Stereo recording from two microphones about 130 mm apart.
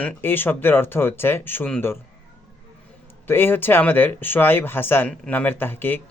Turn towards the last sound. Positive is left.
turn(degrees=15)  # may be behind; listen again after turning